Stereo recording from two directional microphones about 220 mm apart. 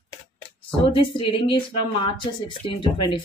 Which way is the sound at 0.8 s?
25° left (ahead or behind).